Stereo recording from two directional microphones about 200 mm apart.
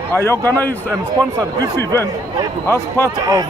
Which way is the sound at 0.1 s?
15° left (ahead or behind).